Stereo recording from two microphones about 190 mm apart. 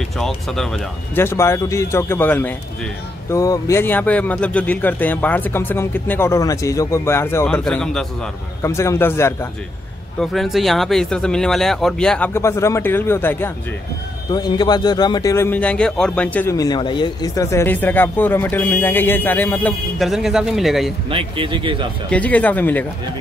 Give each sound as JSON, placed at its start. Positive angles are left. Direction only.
{"t": 0.2, "sound": "speech", "side_deg": 0}
{"t": 1.1, "sound": "a man's voice", "side_deg": 15}
{"t": 8.6, "sound": "a man's voice", "side_deg": 15}
{"t": 10.2, "sound": "speech", "side_deg": 0}
{"t": 12.4, "sound": "a man's voice", "side_deg": 15}
{"t": 14.3, "sound": "a man's voice", "side_deg": 20}
{"t": 20.0, "sound": "speech", "side_deg": 0}
{"t": 21.1, "sound": "speech", "side_deg": -30}
{"t": 22.1, "sound": "a man's voice", "side_deg": 10}